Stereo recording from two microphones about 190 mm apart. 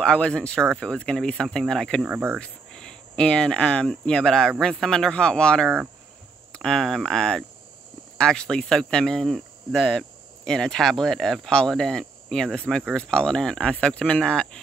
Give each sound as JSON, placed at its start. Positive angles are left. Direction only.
{"t": 0.0, "sound": "speech", "side_deg": 5}
{"t": 2.3, "sound": "speech", "side_deg": 5}